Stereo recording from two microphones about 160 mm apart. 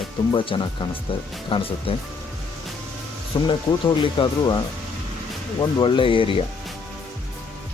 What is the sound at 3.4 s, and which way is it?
Speech, 30° left (ahead or behind).